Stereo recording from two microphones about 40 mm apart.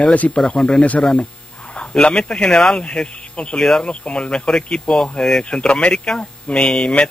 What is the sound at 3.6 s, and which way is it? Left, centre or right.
Speech, centre.